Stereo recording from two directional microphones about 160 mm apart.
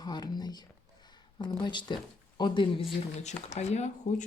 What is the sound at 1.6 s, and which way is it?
Speech, 30° left (ahead or behind).